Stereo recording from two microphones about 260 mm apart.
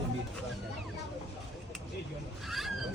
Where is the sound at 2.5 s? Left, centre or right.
Centre.